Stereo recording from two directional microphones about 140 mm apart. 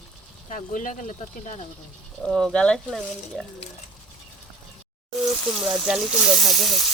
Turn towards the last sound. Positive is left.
turn(degrees=0)  # may be behind; listen again after turning